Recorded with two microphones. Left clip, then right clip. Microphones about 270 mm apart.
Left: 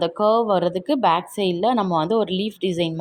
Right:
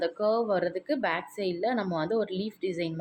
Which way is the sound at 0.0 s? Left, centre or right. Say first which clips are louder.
Left 8 dB; left.